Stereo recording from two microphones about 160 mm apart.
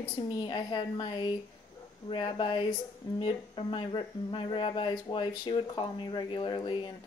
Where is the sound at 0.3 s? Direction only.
30° left (ahead or behind).